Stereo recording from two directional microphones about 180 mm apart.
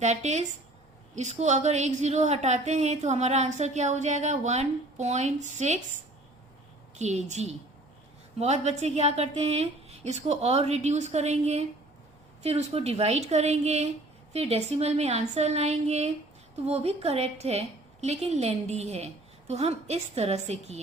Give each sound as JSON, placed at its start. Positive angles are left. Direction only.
{"t": 0.0, "sound": "a woman's voice", "side_deg": -40}